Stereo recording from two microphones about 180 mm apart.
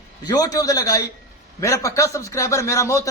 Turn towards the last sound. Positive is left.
turn(degrees=15)  # may be behind; listen again after turning